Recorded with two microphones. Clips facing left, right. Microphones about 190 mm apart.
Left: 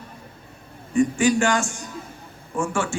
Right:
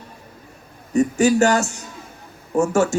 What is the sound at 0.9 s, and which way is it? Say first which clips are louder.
A man's voice: right 3 dB; 40° right (ahead or behind).